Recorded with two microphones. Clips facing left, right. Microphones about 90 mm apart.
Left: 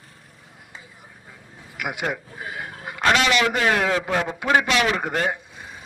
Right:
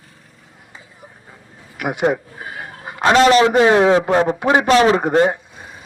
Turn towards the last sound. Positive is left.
turn(degrees=-30)  # may be behind; listen again after turning